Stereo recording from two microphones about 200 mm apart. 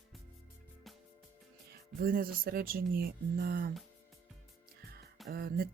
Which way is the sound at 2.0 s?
45° right (ahead or behind).